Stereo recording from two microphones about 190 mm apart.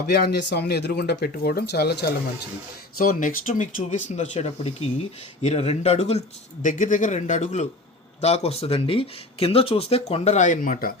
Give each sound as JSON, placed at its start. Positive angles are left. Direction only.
{"t": 0.1, "sound": "speech", "side_deg": 60}
{"t": 3.0, "sound": "speech", "side_deg": 45}